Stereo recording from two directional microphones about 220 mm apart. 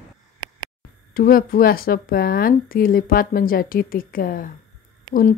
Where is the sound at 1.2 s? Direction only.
40° left (ahead or behind).